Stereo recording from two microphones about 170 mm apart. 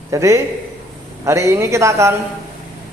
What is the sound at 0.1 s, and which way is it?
A man's voice, 15° right (ahead or behind).